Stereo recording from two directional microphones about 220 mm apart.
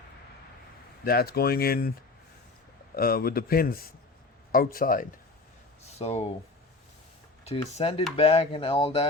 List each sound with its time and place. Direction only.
1.0 s speech: 45° left (ahead or behind)
2.9 s speech: 45° left (ahead or behind)
5.8 s speech: 30° left (ahead or behind)
7.4 s speech: 30° left (ahead or behind)